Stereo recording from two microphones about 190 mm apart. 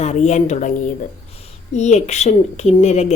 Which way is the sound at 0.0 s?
35° left (ahead or behind).